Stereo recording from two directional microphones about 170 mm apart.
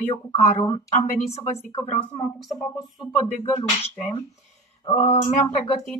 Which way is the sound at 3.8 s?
40° left (ahead or behind).